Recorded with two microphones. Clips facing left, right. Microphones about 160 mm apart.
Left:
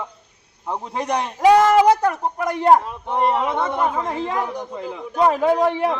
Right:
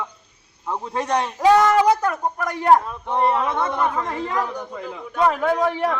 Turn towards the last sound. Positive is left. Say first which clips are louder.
# left 2 dB
turn(degrees=25)  # may be behind; listen again after turning